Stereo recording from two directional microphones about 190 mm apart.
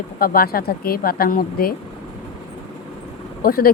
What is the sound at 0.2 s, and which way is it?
Speech, 50° left (ahead or behind).